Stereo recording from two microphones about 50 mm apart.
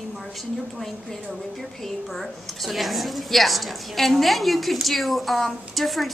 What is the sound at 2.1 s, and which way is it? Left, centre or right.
A woman's voice, centre.